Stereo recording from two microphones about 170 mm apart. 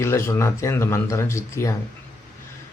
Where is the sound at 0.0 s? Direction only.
15° left (ahead or behind).